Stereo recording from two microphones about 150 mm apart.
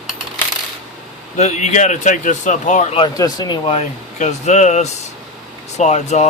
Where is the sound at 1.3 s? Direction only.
50° left (ahead or behind).